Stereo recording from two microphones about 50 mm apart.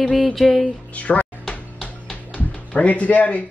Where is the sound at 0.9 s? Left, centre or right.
Left.